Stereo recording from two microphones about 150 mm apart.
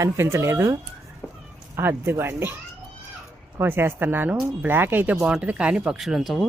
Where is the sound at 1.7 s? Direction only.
15° right (ahead or behind).